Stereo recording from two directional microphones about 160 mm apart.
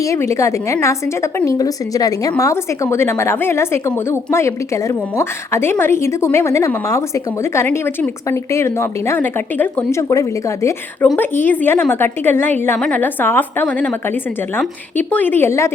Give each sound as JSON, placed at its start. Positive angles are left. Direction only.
{"t": 0.0, "sound": "a woman's voice", "side_deg": 20}
{"t": 14.9, "sound": "a woman's voice", "side_deg": 10}